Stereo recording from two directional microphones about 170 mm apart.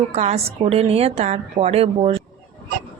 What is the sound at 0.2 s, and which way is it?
A woman's voice, 40° right (ahead or behind).